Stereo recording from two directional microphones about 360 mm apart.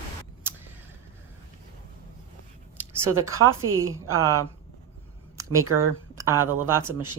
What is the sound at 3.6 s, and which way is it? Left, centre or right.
Speech, right.